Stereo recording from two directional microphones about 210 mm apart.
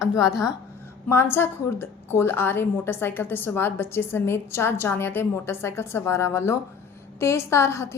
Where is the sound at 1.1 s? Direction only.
10° left (ahead or behind).